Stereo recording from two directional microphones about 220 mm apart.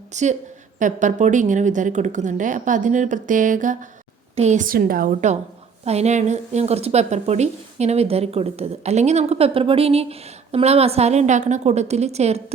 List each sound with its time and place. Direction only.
0.1 s a woman's voice: 30° right (ahead or behind)